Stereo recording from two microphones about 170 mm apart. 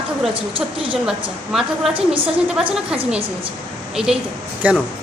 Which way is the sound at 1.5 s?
Centre (ahead or behind).